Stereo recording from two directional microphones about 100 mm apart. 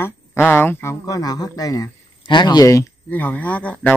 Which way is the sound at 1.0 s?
40° left (ahead or behind).